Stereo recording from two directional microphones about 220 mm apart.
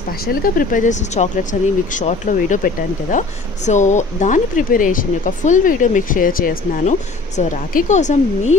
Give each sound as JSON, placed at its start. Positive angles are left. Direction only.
{"t": 0.2, "sound": "speech", "side_deg": 40}